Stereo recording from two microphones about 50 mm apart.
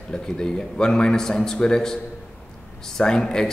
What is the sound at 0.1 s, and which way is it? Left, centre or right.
A man's voice, centre.